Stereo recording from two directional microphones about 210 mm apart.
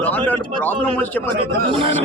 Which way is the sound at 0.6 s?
10° left (ahead or behind).